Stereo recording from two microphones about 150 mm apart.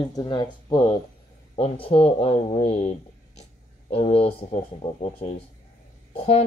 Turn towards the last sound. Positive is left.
turn(degrees=45)  # may be behind; listen again after turning